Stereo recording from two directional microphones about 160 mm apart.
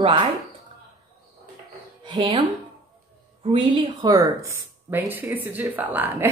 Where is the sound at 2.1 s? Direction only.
30° right (ahead or behind).